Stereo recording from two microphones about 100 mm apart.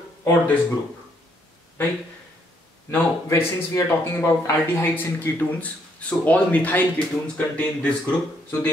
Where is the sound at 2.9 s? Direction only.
20° left (ahead or behind).